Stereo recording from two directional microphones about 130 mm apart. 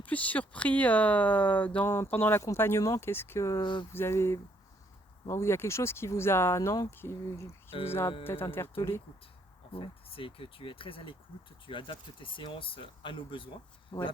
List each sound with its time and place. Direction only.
0.0 s speech: 10° left (ahead or behind)
3.6 s speech: 40° left (ahead or behind)
3.9 s speech: 20° left (ahead or behind)
7.7 s speech: 50° left (ahead or behind)
8.2 s speech: 15° left (ahead or behind)
9.7 s speech: 45° left (ahead or behind)
13.9 s speech: 25° left (ahead or behind)